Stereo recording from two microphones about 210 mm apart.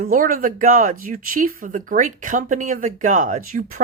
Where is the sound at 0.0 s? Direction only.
40° right (ahead or behind).